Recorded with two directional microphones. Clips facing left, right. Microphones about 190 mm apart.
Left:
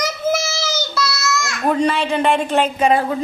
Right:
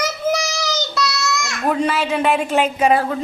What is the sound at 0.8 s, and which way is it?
Child singing, 20° right (ahead or behind).